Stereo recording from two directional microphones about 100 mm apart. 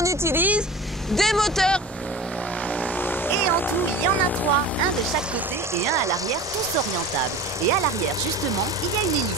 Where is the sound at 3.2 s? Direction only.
20° left (ahead or behind).